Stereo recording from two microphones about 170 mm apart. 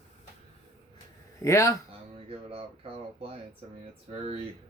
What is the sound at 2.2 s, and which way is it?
Speech, 35° right (ahead or behind).